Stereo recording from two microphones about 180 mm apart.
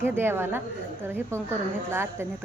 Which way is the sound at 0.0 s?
10° right (ahead or behind).